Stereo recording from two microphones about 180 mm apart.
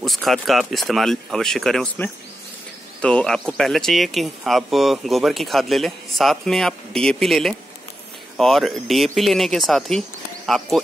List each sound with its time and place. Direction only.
0.0 s speech: centre (ahead or behind)